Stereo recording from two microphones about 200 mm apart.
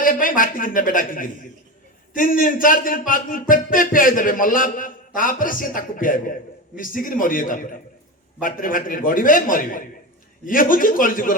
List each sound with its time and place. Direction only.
0.0 s a man's voice: 45° left (ahead or behind)